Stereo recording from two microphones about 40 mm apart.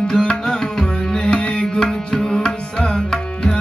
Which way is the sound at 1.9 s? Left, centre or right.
Centre.